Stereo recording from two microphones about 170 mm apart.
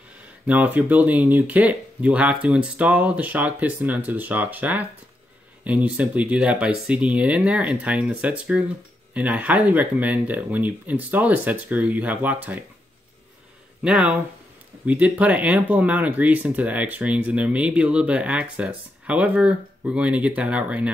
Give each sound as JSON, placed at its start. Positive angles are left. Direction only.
{"t": 0.5, "sound": "speech", "side_deg": -10}
{"t": 13.8, "sound": "speech", "side_deg": -5}